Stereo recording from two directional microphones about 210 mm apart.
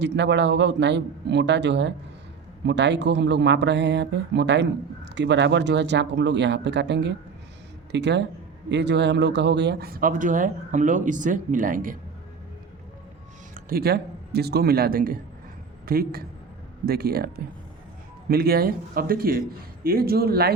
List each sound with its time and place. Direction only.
0.0 s speech: 55° right (ahead or behind); by 11.9 s 40° right (ahead or behind)
13.5 s a man's voice: 45° right (ahead or behind)